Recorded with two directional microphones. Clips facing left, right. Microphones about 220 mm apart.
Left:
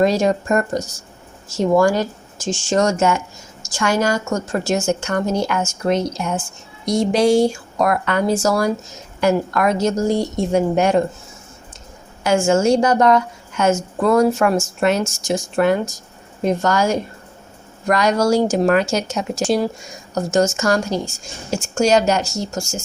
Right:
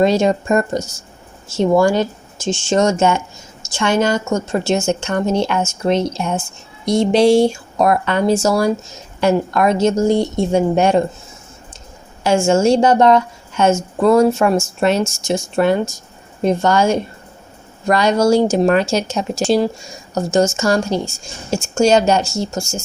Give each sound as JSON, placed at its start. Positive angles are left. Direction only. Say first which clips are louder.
{"t": 0.0, "sound": "speech", "louder": "right 2 dB", "side_deg": -25}
{"t": 12.2, "sound": "speech", "louder": "right 2 dB", "side_deg": -30}